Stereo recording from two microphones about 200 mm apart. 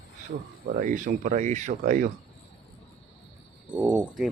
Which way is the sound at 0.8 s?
40° right (ahead or behind).